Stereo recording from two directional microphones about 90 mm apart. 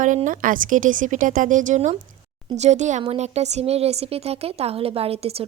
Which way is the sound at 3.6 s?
90° right.